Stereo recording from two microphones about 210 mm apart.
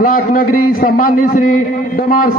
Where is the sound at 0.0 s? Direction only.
40° left (ahead or behind).